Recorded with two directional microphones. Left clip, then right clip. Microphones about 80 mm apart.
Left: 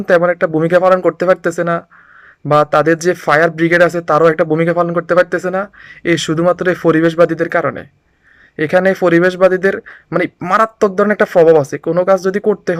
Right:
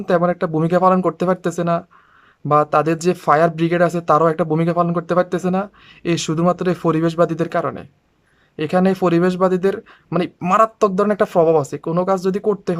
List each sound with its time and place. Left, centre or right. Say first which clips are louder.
0.0 s speech: left 6 dB; right
0.7 s speech: left 4 dB; centre
0.9 s speech: left 7 dB; right
2.5 s speech: left 5 dB; centre